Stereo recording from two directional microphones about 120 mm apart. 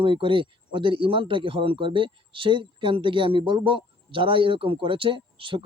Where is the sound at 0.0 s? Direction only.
45° right (ahead or behind).